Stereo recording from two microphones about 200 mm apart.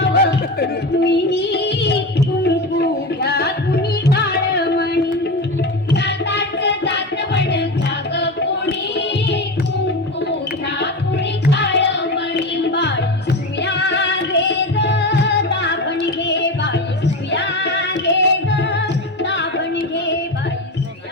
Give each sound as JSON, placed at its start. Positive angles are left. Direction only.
{"t": 0.0, "sound": "music", "side_deg": 55}
{"t": 5.9, "sound": "music", "side_deg": 55}
{"t": 11.5, "sound": "music", "side_deg": 60}